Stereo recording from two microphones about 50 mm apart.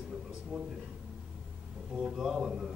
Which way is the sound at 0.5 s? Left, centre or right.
Centre.